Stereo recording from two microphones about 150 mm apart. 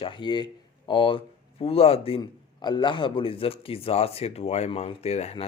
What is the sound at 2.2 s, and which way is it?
Speech, 30° left (ahead or behind).